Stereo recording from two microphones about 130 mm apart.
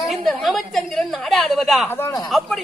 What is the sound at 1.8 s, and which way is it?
Speech, 15° left (ahead or behind).